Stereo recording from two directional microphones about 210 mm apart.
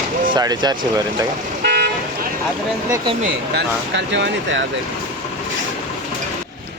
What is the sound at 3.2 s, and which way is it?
Speech, 55° right (ahead or behind).